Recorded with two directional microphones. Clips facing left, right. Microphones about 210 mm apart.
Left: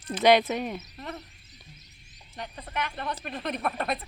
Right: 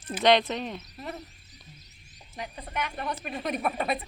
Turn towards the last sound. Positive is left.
turn(degrees=-5)  # may be behind; listen again after turning